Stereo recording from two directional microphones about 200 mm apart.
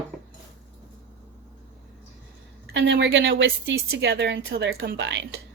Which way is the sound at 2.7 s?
60° right (ahead or behind).